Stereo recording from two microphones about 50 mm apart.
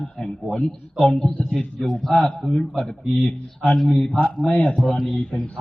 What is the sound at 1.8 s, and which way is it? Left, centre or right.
A man's voice, centre.